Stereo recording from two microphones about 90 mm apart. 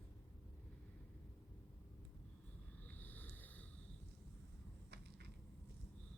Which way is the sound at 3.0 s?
20° left (ahead or behind).